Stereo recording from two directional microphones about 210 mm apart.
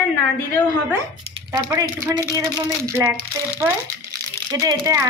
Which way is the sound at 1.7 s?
15° right (ahead or behind).